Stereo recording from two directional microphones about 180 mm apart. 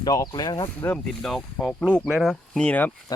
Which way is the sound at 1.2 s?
Centre (ahead or behind).